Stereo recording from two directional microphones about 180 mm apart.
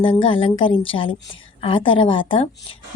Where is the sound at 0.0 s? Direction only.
30° left (ahead or behind).